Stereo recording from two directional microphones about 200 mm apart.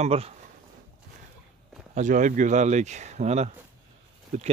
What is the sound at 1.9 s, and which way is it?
Speech, 40° right (ahead or behind).